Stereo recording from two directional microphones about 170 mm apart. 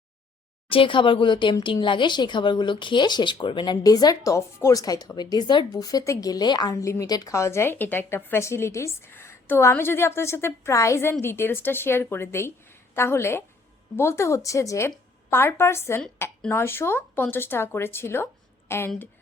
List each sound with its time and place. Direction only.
0.7 s speech: 30° left (ahead or behind); by 18.8 s 15° left (ahead or behind)